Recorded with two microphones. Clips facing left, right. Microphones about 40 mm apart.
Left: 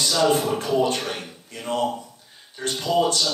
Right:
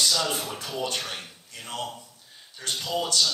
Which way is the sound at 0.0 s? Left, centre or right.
Left.